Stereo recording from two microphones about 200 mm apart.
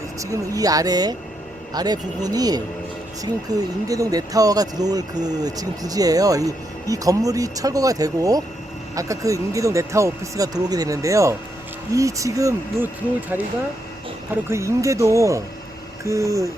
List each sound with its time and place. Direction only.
0.2 s speech: 15° right (ahead or behind)
14.5 s speech: 15° right (ahead or behind)